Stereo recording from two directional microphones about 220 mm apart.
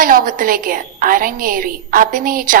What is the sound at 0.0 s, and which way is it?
A woman's voice, 40° right (ahead or behind).